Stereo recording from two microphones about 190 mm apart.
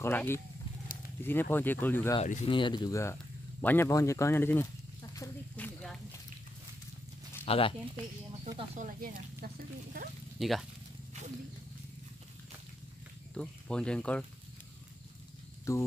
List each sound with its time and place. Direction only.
0.0 s speech: 10° left (ahead or behind)
2.2 s speech: 40° left (ahead or behind)
2.5 s speech: 25° left (ahead or behind)
7.4 s speech: 30° left (ahead or behind)
8.7 s speech: 45° right (ahead or behind)
10.4 s speech: centre (ahead or behind)
13.3 s speech: 5° left (ahead or behind)
15.7 s speech: 15° left (ahead or behind)